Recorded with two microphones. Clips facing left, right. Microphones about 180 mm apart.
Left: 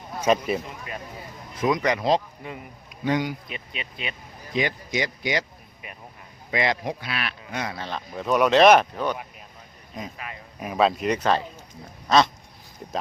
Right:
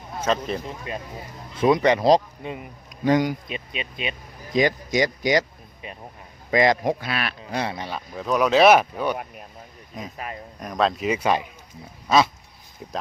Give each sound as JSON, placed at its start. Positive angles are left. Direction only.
{"t": 0.2, "sound": "speech", "side_deg": 10}
{"t": 1.5, "sound": "speech", "side_deg": -30}
{"t": 2.4, "sound": "speech", "side_deg": -20}
{"t": 3.0, "sound": "a man's voice", "side_deg": -45}
{"t": 3.5, "sound": "speech", "side_deg": -20}
{"t": 4.5, "sound": "speech", "side_deg": -40}
{"t": 5.8, "sound": "speech", "side_deg": -25}
{"t": 6.5, "sound": "a man's voice", "side_deg": -40}
{"t": 7.8, "sound": "speech", "side_deg": -10}